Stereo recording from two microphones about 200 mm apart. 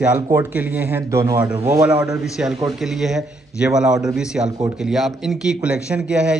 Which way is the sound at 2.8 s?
Centre (ahead or behind).